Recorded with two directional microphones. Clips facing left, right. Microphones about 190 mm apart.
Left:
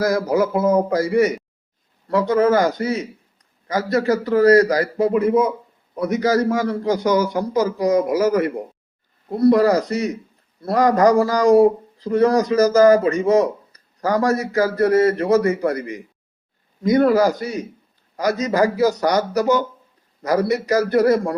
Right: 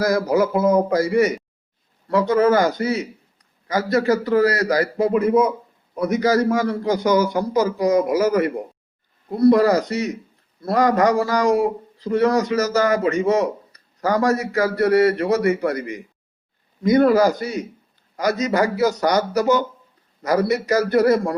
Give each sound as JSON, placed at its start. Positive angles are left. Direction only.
{"t": 0.0, "sound": "a man's voice", "side_deg": 30}
{"t": 6.2, "sound": "a man's voice", "side_deg": 35}
{"t": 18.2, "sound": "a man's voice", "side_deg": 30}